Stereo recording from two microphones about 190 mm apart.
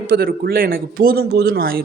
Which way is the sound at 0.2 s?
50° right (ahead or behind).